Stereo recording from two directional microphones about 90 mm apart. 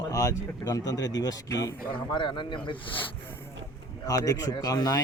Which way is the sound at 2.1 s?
60° left (ahead or behind).